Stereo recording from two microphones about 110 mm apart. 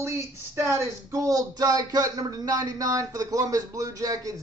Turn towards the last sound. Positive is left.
turn(degrees=-30)  # may be behind; listen again after turning